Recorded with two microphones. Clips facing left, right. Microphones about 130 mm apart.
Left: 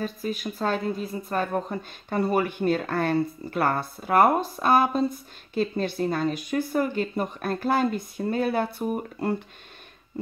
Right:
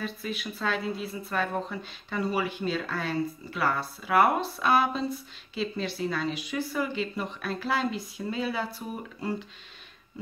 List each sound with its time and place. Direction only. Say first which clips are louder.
0.0 s a woman's voice: left 5 dB; 45° left (ahead or behind)